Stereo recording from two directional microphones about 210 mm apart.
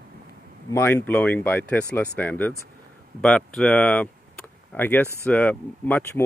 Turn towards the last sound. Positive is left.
turn(degrees=10)  # may be behind; listen again after turning